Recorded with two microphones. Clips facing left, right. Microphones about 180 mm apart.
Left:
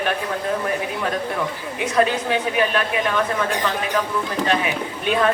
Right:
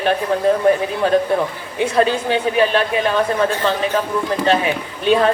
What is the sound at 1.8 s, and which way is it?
A woman's voice, 30° right (ahead or behind).